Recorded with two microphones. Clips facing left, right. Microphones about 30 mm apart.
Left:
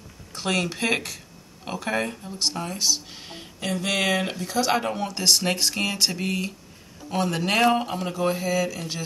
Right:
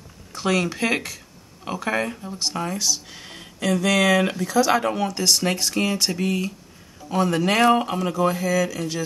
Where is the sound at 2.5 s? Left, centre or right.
Right.